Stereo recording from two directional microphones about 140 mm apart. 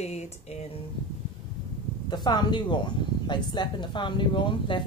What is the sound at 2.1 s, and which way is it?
Speech, 30° left (ahead or behind).